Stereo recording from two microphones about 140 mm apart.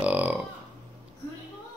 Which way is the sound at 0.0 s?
10° right (ahead or behind).